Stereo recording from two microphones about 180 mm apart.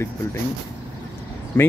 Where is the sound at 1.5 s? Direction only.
10° left (ahead or behind).